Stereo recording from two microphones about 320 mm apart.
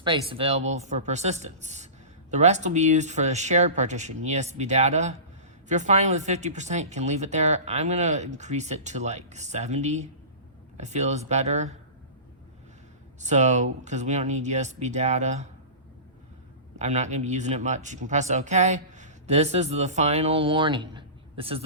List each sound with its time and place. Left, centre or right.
0.0 s speech: centre
13.1 s speech: right
16.7 s speech: right